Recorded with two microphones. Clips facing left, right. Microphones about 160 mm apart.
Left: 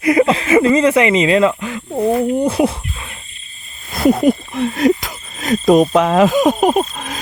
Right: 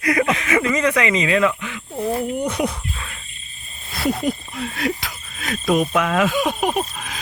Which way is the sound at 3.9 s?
50° left (ahead or behind).